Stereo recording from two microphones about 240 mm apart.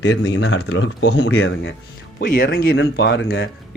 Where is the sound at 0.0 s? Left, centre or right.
Left.